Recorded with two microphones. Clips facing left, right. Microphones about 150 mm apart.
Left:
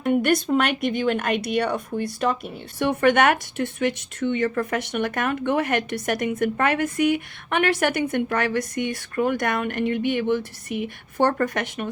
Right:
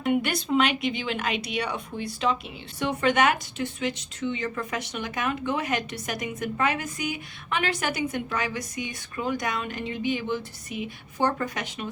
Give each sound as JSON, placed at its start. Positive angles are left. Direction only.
{"t": 0.1, "sound": "speech", "side_deg": 45}